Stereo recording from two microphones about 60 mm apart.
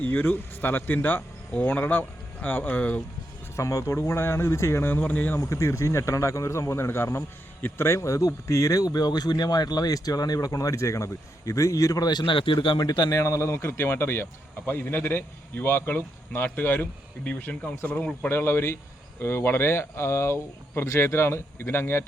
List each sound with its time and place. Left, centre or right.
0.0 s speech: left
3.5 s speech: left
4.0 s speech: left
4.9 s speech: left
5.4 s speech: left
17.2 s speech: left
18.3 s speech: left